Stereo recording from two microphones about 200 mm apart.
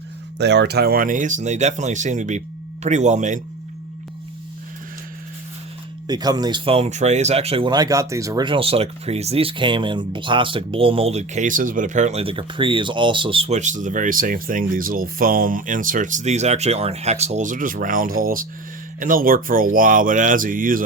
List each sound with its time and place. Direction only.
0.3 s speech: 60° right (ahead or behind); by 3.4 s 40° right (ahead or behind)
6.1 s speech: 20° right (ahead or behind); by 20.8 s 45° right (ahead or behind)